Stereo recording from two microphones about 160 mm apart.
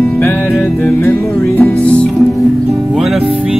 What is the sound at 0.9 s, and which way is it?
Music, 15° left (ahead or behind).